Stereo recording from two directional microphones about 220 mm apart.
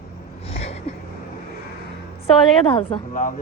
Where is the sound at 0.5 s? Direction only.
30° left (ahead or behind).